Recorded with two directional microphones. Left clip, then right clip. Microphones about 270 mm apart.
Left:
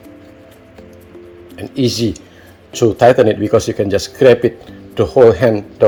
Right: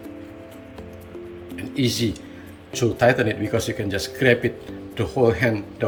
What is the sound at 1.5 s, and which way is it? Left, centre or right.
Speech, left.